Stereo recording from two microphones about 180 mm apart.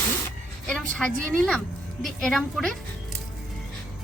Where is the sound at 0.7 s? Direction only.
5° left (ahead or behind).